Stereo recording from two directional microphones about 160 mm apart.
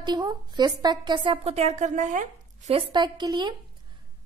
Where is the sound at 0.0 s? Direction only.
25° right (ahead or behind); by 2.7 s 50° right (ahead or behind).